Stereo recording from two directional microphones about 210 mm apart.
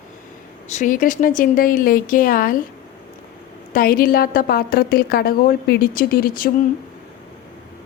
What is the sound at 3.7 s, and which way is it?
A woman's voice, 45° left (ahead or behind).